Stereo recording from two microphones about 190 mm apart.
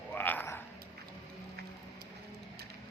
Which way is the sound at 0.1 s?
10° left (ahead or behind).